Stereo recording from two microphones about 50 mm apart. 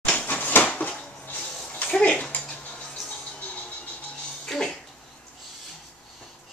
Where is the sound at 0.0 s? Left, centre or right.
Left.